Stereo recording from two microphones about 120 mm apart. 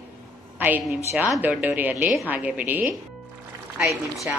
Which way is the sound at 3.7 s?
Centre (ahead or behind).